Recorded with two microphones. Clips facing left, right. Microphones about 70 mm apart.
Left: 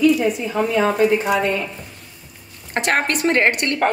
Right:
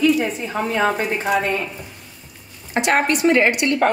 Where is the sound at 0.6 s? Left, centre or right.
Right.